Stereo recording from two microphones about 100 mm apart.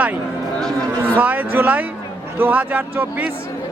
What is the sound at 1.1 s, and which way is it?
A man's voice, 20° right (ahead or behind).